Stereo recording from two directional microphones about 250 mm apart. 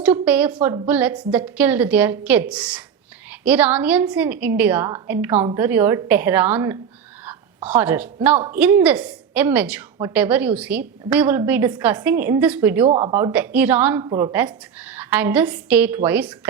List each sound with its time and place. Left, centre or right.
0.0 s a woman's voice: centre
12.9 s speech: centre
13.3 s a woman's voice: centre